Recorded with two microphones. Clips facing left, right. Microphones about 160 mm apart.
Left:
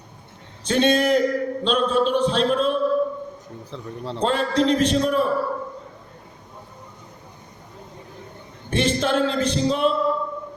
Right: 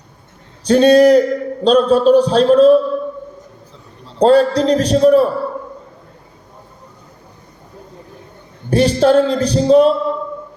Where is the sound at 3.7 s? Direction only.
70° left (ahead or behind).